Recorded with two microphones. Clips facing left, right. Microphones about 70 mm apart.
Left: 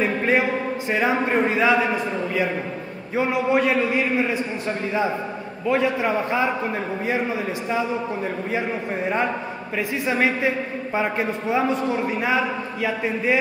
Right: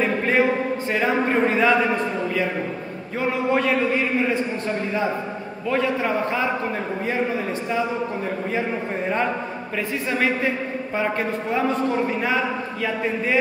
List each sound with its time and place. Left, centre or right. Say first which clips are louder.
0.0 s a sound: right 1 dB; centre
3.2 s a man's voice: left 2 dB; centre
5.7 s a man's voice: left 1 dB; centre
11.0 s a man's voice: even; centre
12.8 s a man's voice: left 1 dB; centre